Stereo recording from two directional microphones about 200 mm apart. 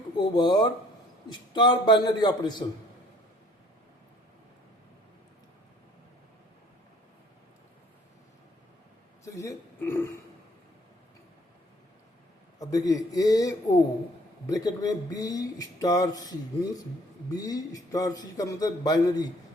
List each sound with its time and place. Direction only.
0.2 s speech: 20° left (ahead or behind)
9.2 s speech: 15° left (ahead or behind)
12.5 s a man's voice: 15° left (ahead or behind)